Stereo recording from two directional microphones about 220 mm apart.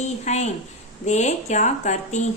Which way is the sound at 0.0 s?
30° left (ahead or behind).